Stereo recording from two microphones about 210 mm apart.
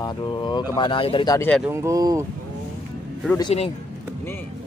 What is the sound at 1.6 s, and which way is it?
Speech, 15° right (ahead or behind).